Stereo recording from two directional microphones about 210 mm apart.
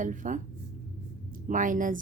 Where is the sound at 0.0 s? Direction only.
40° right (ahead or behind).